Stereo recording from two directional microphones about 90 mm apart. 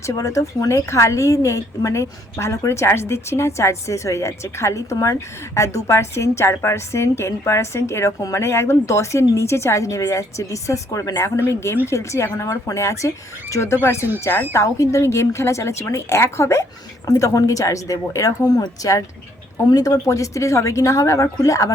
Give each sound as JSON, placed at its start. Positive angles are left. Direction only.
{"t": 0.0, "sound": "a woman's voice", "side_deg": 35}
{"t": 11.3, "sound": "a woman's voice", "side_deg": 30}